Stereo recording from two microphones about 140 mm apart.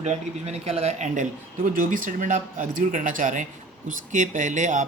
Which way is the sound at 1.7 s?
70° right (ahead or behind).